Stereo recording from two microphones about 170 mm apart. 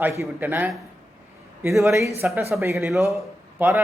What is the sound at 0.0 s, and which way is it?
A man's voice, 10° right (ahead or behind).